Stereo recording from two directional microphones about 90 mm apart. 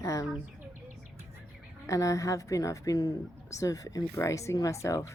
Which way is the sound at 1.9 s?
35° left (ahead or behind).